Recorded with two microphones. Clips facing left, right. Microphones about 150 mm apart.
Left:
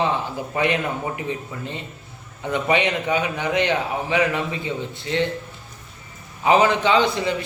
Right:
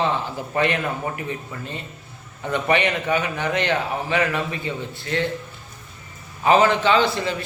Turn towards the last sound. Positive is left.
turn(degrees=15)  # may be behind; listen again after turning